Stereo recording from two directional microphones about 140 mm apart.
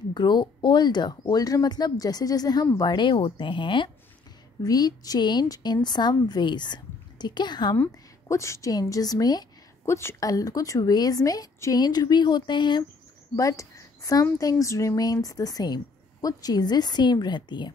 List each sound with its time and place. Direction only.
0.1 s a woman's voice: 30° left (ahead or behind)
7.7 s a woman's voice: 20° left (ahead or behind)
13.4 s a woman's voice: 25° left (ahead or behind)